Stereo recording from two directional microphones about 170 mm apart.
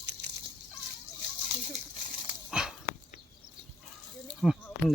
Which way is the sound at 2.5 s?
5° right (ahead or behind).